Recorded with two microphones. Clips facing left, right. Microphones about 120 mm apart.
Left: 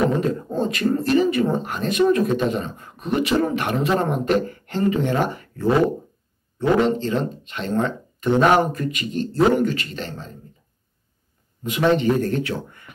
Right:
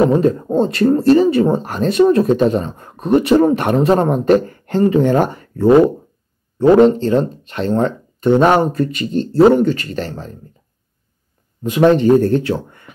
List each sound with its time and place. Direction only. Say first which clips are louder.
0.0 s speech: right 7 dB; 30° right (ahead or behind)
11.6 s speech: right 7 dB; 40° right (ahead or behind)